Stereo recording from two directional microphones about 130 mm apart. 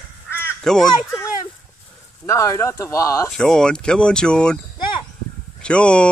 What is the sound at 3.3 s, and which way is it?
Speech, 5° left (ahead or behind).